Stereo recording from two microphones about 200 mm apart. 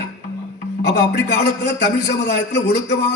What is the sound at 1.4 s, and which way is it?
A man's voice, 55° left (ahead or behind).